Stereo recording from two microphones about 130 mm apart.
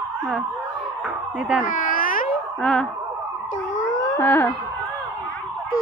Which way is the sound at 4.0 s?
25° left (ahead or behind).